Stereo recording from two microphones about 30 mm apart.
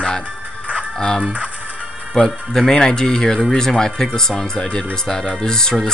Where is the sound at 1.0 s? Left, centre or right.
Left.